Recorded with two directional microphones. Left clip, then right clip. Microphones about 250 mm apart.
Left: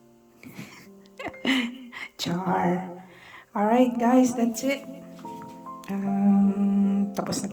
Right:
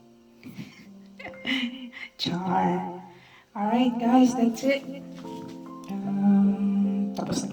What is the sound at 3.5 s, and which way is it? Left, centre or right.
A woman's voice, left.